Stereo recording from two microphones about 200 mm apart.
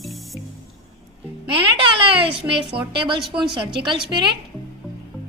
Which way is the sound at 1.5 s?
25° right (ahead or behind).